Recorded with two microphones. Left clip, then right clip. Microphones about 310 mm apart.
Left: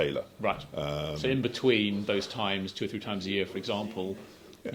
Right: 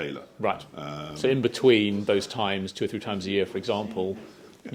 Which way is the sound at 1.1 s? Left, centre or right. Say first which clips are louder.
Right 10 dB; right.